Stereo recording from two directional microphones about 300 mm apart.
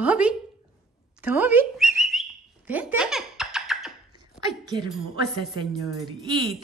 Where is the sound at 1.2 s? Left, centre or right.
Centre.